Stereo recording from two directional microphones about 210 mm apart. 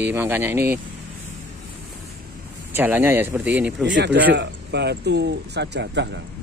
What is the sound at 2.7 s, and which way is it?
Speech, 10° right (ahead or behind).